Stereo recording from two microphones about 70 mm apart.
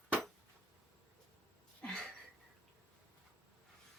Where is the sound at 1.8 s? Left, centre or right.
Centre.